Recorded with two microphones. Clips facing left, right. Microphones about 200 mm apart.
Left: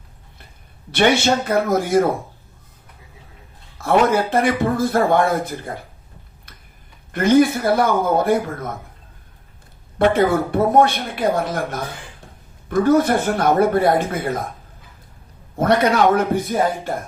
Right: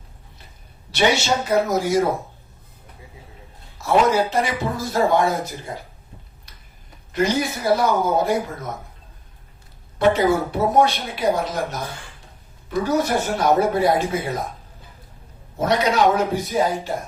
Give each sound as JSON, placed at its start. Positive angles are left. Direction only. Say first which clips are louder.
{"t": 0.9, "sound": "a man's voice", "louder": "left 3 dB", "side_deg": 55}
{"t": 3.8, "sound": "a man's voice", "louder": "left 1 dB", "side_deg": 55}
{"t": 7.1, "sound": "a man's voice", "louder": "left 7 dB", "side_deg": 55}
{"t": 10.0, "sound": "a man's voice", "louder": "left 1 dB", "side_deg": 55}
{"t": 15.5, "sound": "a man's voice", "louder": "left 3 dB", "side_deg": 55}